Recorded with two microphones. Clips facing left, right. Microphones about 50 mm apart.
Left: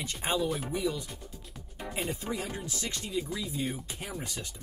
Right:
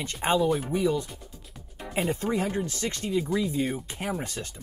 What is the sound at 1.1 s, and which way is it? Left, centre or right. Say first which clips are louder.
Music: even; centre.